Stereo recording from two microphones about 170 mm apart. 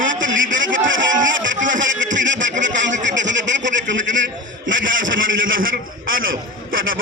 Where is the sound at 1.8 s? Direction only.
90° right.